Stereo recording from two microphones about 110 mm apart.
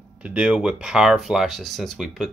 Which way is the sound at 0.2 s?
10° right (ahead or behind).